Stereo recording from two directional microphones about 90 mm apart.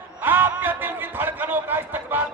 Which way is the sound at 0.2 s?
20° right (ahead or behind).